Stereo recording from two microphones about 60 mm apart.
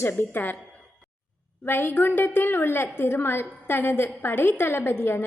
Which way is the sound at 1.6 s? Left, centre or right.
Left.